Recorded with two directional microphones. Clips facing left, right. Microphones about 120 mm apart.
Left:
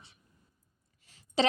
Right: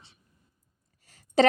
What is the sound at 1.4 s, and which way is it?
Speech, 50° right (ahead or behind).